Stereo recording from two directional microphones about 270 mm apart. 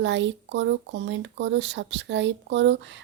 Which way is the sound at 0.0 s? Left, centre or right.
Right.